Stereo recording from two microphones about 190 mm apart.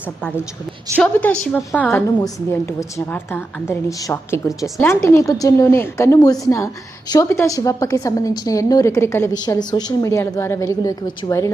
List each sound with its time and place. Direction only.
0.9 s a woman's voice: 5° left (ahead or behind)